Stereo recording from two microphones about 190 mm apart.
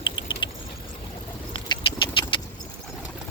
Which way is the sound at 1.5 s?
25° left (ahead or behind).